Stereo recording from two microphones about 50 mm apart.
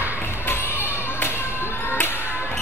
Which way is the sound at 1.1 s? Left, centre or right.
Left.